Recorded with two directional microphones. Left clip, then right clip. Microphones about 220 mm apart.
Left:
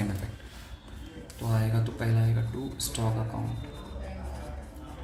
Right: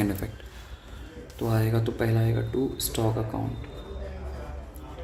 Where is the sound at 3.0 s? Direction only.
40° right (ahead or behind).